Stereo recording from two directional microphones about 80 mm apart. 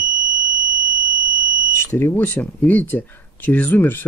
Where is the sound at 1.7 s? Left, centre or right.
Left.